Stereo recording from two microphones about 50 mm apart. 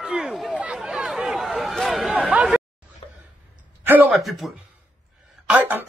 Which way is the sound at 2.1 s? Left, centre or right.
Right.